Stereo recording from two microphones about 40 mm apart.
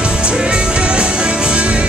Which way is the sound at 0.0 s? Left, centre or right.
Right.